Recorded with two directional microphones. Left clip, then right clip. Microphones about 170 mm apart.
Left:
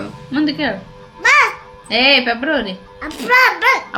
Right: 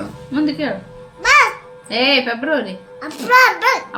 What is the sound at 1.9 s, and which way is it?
Speech, 40° left (ahead or behind).